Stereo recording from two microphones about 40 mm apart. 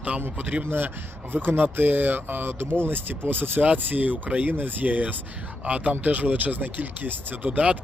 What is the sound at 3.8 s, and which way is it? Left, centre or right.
Speech, right.